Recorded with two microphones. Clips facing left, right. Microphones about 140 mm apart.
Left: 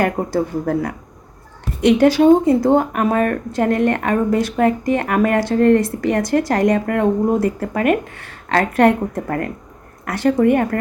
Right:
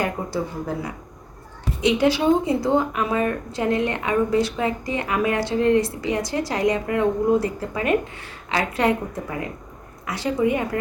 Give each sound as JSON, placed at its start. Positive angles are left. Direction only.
{"t": 0.0, "sound": "speech", "side_deg": 55}